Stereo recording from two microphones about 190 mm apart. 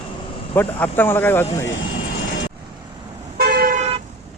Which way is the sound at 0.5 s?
10° left (ahead or behind).